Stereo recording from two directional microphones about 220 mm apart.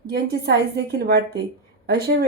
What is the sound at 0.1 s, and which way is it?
Speech, 45° right (ahead or behind).